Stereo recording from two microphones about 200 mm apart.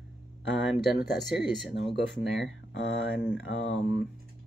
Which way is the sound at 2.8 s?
65° left (ahead or behind).